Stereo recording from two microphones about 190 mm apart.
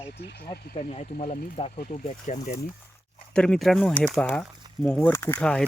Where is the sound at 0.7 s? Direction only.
35° left (ahead or behind).